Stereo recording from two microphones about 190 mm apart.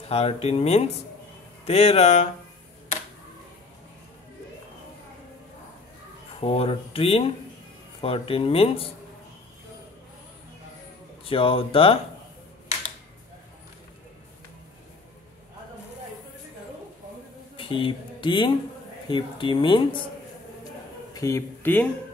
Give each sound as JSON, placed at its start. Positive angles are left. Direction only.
{"t": 0.1, "sound": "speech", "side_deg": 30}
{"t": 6.4, "sound": "speech", "side_deg": 30}
{"t": 11.2, "sound": "speech", "side_deg": 30}
{"t": 17.6, "sound": "speech", "side_deg": 25}
{"t": 21.1, "sound": "speech", "side_deg": 15}